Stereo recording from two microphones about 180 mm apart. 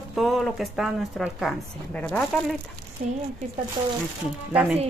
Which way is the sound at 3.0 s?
45° right (ahead or behind).